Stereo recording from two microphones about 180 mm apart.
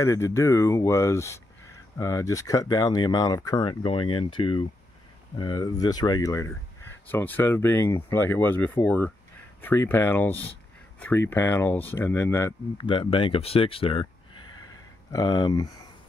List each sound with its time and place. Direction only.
0.0 s speech: 15° left (ahead or behind)
12.8 s speech: 25° left (ahead or behind)
15.0 s speech: 20° left (ahead or behind)